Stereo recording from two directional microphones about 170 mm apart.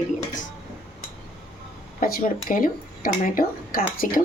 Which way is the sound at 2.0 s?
55° left (ahead or behind).